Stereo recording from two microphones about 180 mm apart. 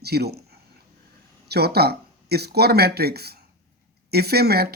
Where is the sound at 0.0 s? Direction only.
60° right (ahead or behind).